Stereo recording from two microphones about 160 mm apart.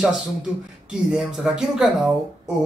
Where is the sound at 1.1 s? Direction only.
5° right (ahead or behind).